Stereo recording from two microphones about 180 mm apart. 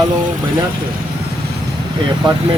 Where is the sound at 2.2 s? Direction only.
25° right (ahead or behind).